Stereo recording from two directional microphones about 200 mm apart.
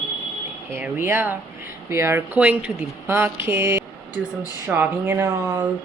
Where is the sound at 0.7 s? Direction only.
10° right (ahead or behind).